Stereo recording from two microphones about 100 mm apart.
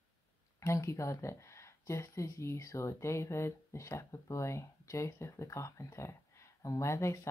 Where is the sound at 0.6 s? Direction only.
30° left (ahead or behind).